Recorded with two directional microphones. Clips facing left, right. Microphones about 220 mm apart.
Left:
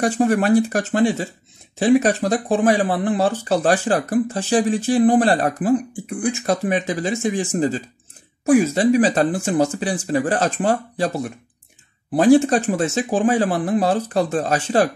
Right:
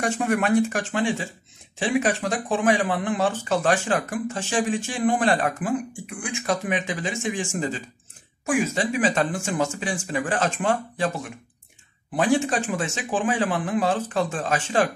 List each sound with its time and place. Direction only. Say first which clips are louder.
0.0 s speech: left 6 dB; 35° left (ahead or behind)